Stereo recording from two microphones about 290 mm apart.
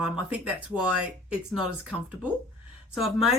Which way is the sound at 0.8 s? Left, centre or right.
Right.